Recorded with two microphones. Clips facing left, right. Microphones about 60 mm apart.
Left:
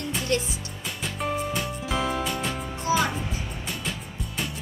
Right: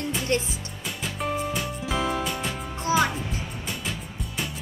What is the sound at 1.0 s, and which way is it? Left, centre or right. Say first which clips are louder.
Music: even; centre.